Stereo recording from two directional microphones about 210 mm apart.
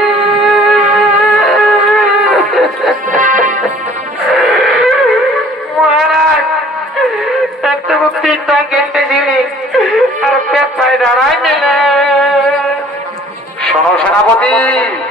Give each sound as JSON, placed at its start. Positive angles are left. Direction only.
{"t": 0.0, "sound": "music", "side_deg": 0}
{"t": 3.2, "sound": "music", "side_deg": -40}
{"t": 4.3, "sound": "music", "side_deg": 0}
{"t": 7.6, "sound": "a sound", "side_deg": 0}
{"t": 13.7, "sound": "music", "side_deg": 5}